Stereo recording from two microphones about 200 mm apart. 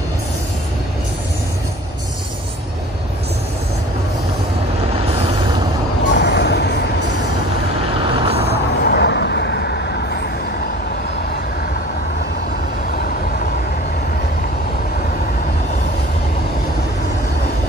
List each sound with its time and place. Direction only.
6.1 s vehicle: 60° left (ahead or behind)
8.0 s vehicle: 25° right (ahead or behind)
8.5 s vehicle: 55° left (ahead or behind)